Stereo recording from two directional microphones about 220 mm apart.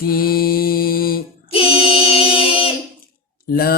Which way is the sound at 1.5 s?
25° left (ahead or behind).